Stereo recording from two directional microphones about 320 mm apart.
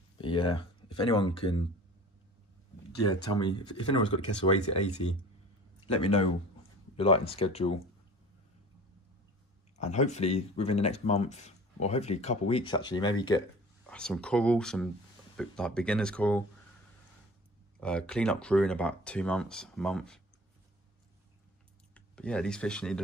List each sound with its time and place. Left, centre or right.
0.2 s speech: centre
3.1 s speech: centre
9.8 s speech: left; by 16.4 s centre
17.7 s speech: centre
21.9 s speech: centre